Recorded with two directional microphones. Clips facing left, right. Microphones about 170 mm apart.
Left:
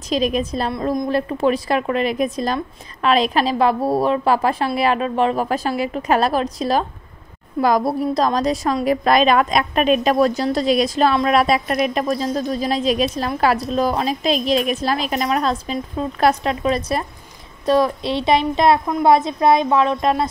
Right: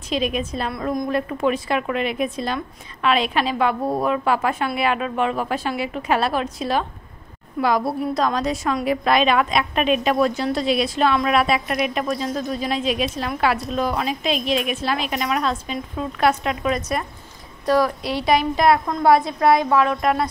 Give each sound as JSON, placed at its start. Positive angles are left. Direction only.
{"t": 0.1, "sound": "a woman's voice", "side_deg": 40}
{"t": 0.7, "sound": "a woman's voice", "side_deg": 25}